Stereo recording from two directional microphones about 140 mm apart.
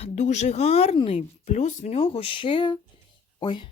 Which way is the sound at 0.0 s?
55° left (ahead or behind).